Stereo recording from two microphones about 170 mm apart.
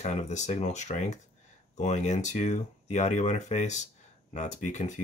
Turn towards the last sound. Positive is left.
turn(degrees=45)  # may be behind; listen again after turning